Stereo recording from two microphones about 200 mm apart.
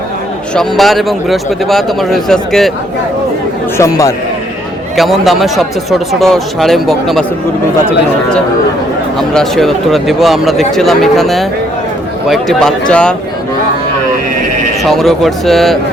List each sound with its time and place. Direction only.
0.5 s speech: centre (ahead or behind)
3.8 s a man's voice: 15° left (ahead or behind)
4.9 s speech: centre (ahead or behind)
9.3 s speech: centre (ahead or behind)
14.8 s speech: centre (ahead or behind)